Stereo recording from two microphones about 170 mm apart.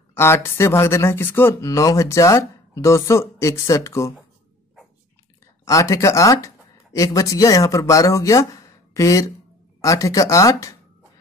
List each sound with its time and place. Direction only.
0.1 s speech: 15° left (ahead or behind)
5.7 s speech: 20° left (ahead or behind)